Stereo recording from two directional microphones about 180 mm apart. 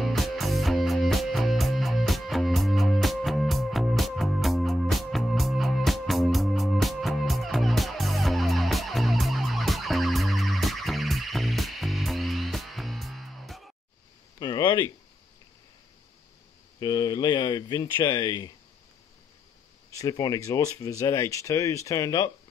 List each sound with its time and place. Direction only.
0.0 s music: centre (ahead or behind)
14.4 s a sound: 25° left (ahead or behind)
16.8 s speech: 25° left (ahead or behind)
20.0 s speech: 20° left (ahead or behind)